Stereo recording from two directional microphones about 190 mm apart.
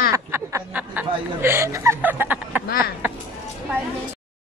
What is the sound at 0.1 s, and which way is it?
Speech, 15° right (ahead or behind).